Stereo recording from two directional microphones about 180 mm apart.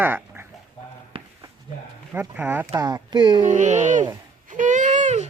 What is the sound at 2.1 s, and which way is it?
Speech, 10° right (ahead or behind).